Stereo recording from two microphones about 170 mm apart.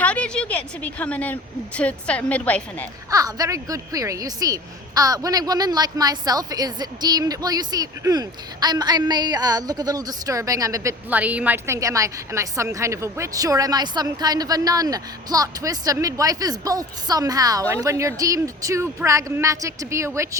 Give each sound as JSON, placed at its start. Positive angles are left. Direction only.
{"t": 0.0, "sound": "a woman's voice", "side_deg": 5}
{"t": 3.1, "sound": "a woman's voice", "side_deg": -20}